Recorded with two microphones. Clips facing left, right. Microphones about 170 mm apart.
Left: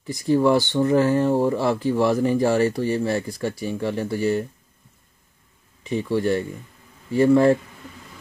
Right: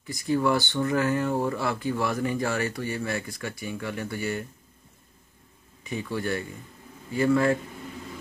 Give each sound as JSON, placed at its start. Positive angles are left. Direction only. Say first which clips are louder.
{"t": 0.0, "sound": "speech", "louder": "left 6 dB", "side_deg": 30}
{"t": 6.0, "sound": "speech", "louder": "left 8 dB", "side_deg": 30}